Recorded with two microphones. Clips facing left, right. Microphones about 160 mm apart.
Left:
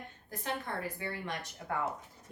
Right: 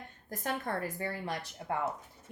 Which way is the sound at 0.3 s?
45° right (ahead or behind).